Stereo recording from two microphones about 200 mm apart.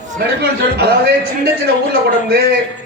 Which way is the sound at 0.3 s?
55° right (ahead or behind).